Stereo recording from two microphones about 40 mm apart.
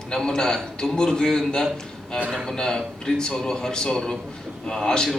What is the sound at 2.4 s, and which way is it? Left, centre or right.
Speech, centre.